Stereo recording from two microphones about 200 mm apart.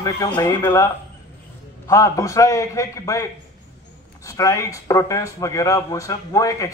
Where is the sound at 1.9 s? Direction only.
15° left (ahead or behind).